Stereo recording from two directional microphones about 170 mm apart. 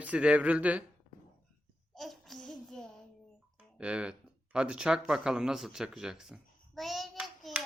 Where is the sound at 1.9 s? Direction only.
Centre (ahead or behind).